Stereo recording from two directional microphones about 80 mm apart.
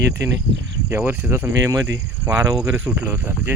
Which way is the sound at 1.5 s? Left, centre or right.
Right.